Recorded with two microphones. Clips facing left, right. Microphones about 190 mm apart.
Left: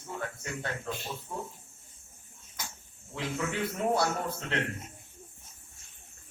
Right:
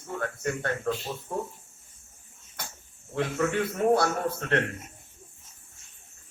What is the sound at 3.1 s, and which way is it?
Speech, 55° right (ahead or behind).